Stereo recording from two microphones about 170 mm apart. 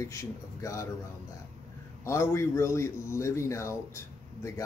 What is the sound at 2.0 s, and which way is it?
Speech, 15° left (ahead or behind).